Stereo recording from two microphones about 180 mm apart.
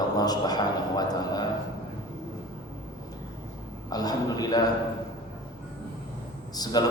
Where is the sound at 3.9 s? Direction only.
20° left (ahead or behind).